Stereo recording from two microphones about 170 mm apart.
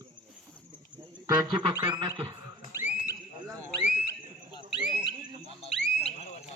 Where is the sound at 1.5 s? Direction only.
30° right (ahead or behind).